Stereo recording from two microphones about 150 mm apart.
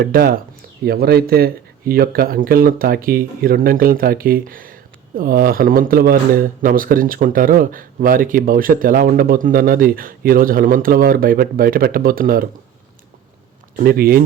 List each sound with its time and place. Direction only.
0.0 s speech: 85° right
13.7 s speech: 85° right